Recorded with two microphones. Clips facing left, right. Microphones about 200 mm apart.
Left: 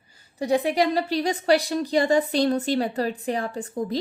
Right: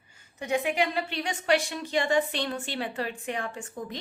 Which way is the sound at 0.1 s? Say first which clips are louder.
Left 6 dB; 35° left (ahead or behind).